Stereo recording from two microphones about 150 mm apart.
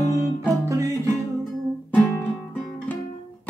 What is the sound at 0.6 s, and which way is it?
Music, 20° right (ahead or behind).